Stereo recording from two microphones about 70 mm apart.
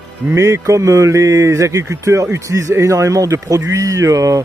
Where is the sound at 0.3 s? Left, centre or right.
Right.